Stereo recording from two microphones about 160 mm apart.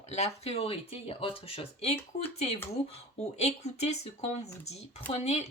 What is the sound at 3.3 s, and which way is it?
A woman's voice, 45° left (ahead or behind).